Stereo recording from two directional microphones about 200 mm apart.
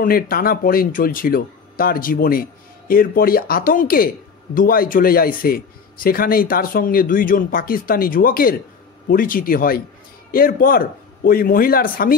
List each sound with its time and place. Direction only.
0.0 s a man's voice: 45° left (ahead or behind)